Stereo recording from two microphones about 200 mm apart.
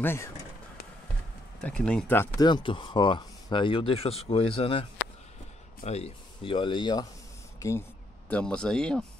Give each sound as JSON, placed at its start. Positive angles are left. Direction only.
{"t": 0.0, "sound": "speech", "side_deg": 10}
{"t": 1.6, "sound": "speech", "side_deg": 5}
{"t": 5.9, "sound": "speech", "side_deg": 30}